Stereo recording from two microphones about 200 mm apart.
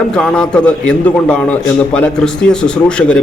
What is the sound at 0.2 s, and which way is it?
A man's voice, 5° left (ahead or behind).